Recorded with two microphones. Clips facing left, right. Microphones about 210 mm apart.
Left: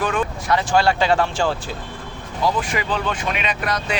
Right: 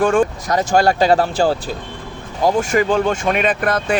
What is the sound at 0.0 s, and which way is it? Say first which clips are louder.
Speech: right 8 dB; 45° right (ahead or behind).